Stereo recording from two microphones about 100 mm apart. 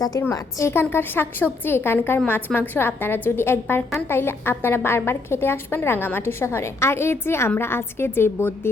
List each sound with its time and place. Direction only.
0.3 s a woman's voice: 25° left (ahead or behind)